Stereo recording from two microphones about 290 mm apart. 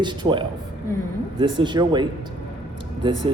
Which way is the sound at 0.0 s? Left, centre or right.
Centre.